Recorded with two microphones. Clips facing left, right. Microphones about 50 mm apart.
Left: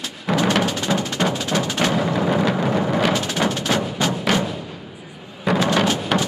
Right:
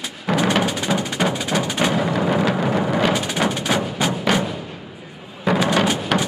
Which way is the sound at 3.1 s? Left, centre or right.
Centre.